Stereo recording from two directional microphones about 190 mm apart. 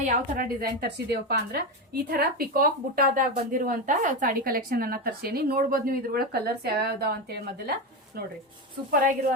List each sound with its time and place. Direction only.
0.0 s a woman's voice: 45° right (ahead or behind)